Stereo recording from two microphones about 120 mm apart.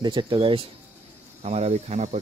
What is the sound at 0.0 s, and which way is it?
Speech, 40° right (ahead or behind).